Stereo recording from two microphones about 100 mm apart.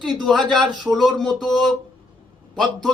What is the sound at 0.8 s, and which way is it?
Speech, centre (ahead or behind).